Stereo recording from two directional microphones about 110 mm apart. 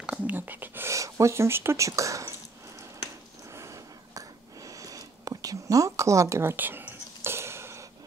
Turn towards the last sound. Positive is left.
turn(degrees=-25)  # may be behind; listen again after turning